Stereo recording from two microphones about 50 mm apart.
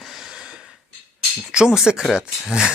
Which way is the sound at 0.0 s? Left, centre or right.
Centre.